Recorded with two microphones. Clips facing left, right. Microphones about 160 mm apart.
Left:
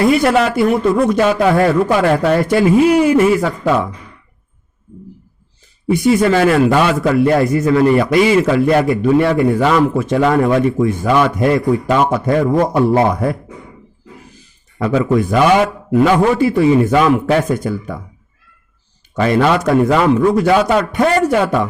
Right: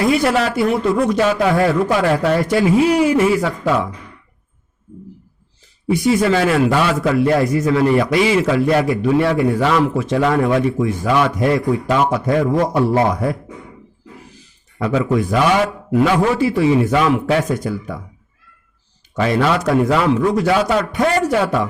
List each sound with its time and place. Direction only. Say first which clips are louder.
0.3 s a man's voice: left 3 dB; 55° left (ahead or behind)
5.9 s a man's voice: left 3 dB; 55° left (ahead or behind)
14.8 s a man's voice: left 3 dB; 50° left (ahead or behind)
19.1 s a man's voice: left 3 dB; 55° left (ahead or behind)